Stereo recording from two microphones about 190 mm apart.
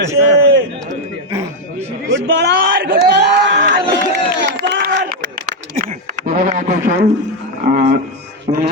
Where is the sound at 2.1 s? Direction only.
65° right (ahead or behind).